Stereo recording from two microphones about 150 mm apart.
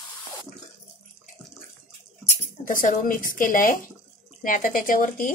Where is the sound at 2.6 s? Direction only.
65° left (ahead or behind).